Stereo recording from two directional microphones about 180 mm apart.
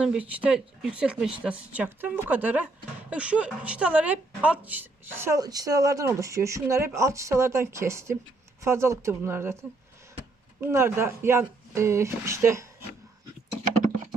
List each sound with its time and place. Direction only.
0.0 s a woman's voice: 5° right (ahead or behind)